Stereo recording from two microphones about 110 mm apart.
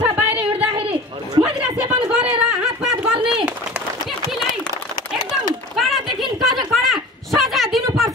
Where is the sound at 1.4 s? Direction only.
5° right (ahead or behind).